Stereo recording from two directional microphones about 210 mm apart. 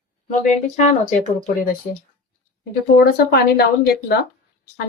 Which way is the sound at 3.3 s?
45° left (ahead or behind).